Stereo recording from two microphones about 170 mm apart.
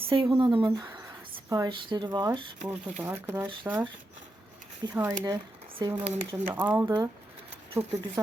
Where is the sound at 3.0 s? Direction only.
10° right (ahead or behind).